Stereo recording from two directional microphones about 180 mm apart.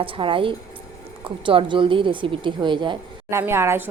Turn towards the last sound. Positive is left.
turn(degrees=-15)  # may be behind; listen again after turning